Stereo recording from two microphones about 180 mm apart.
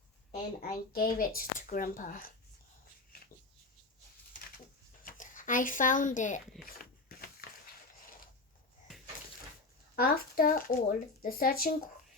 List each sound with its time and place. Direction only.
0.7 s speech: 50° left (ahead or behind)
5.0 s speech: 45° left (ahead or behind)
6.6 s a sound: 55° left (ahead or behind)
9.9 s speech: 55° left (ahead or behind)